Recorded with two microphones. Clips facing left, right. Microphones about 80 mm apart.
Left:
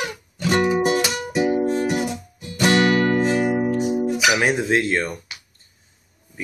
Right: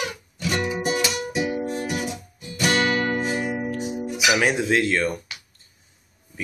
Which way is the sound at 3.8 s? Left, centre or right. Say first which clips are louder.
Left 7 dB; left.